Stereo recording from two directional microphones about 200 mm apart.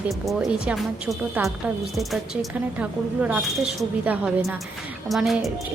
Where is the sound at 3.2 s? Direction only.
5° right (ahead or behind).